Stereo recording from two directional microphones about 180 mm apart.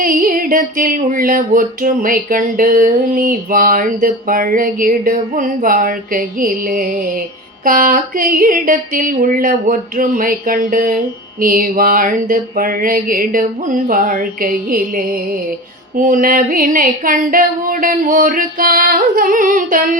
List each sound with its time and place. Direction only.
0.0 s speech: 50° right (ahead or behind)